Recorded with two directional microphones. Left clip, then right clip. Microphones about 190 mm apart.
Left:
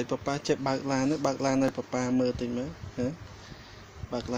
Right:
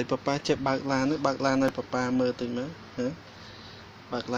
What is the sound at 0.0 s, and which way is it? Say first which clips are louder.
Speech: right 3 dB; 5° left (ahead or behind).